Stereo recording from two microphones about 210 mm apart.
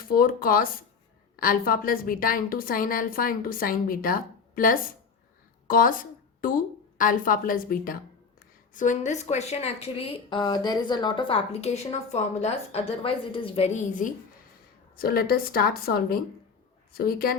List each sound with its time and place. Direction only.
0.1 s a woman's voice: 45° left (ahead or behind)
5.6 s a sound: 40° left (ahead or behind)
7.0 s a woman's voice: 40° left (ahead or behind)
14.9 s a woman's voice: 45° left (ahead or behind)